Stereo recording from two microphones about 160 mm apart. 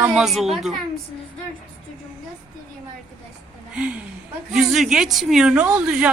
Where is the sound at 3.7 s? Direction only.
5° right (ahead or behind).